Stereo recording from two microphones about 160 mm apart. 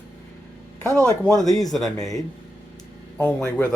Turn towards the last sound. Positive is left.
turn(degrees=5)  # may be behind; listen again after turning